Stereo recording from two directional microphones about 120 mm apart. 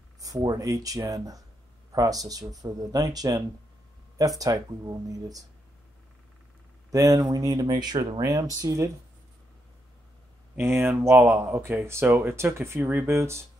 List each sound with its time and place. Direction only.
0.2 s speech: 30° right (ahead or behind)
6.9 s speech: 30° right (ahead or behind)
10.5 s speech: 20° right (ahead or behind)